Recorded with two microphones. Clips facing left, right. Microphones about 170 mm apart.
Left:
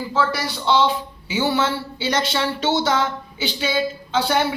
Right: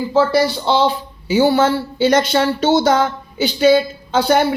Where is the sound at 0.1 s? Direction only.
30° right (ahead or behind).